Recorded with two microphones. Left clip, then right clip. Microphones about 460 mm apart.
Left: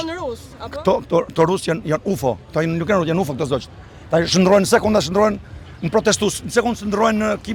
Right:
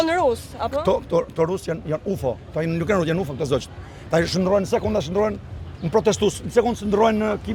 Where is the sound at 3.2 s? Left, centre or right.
Left.